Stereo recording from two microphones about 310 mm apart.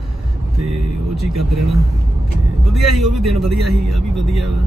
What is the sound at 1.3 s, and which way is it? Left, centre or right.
Speech, right.